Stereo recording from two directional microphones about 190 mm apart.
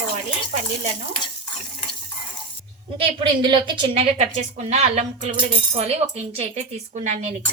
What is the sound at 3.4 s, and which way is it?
A woman's voice, 25° right (ahead or behind).